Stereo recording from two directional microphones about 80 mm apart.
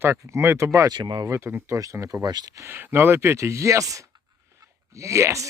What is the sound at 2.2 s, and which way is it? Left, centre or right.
Speech, right.